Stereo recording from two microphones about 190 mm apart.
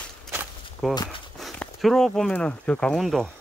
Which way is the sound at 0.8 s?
Centre (ahead or behind).